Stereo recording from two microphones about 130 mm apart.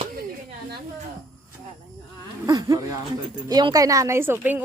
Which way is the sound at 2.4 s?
30° right (ahead or behind).